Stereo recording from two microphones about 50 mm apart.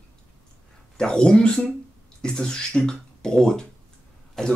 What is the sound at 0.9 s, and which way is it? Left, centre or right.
Speech, centre.